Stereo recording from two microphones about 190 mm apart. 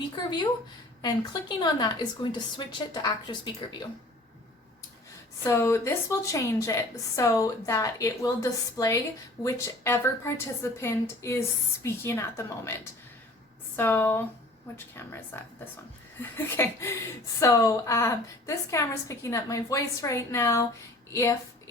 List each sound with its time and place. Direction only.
1.0 s a woman's voice: 20° left (ahead or behind)
5.5 s a woman's voice: 15° left (ahead or behind)